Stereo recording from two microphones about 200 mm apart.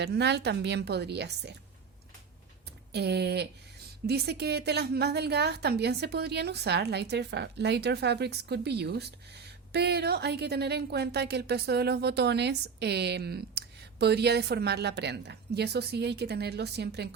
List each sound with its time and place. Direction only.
0.0 s a woman's voice: 55° right (ahead or behind)
2.9 s a woman's voice: 55° right (ahead or behind)